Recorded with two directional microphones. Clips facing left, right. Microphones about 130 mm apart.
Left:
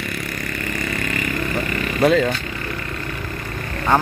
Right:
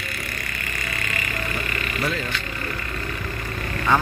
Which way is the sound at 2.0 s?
85° left.